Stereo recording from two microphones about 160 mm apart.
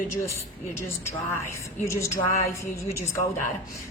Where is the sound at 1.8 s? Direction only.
20° left (ahead or behind).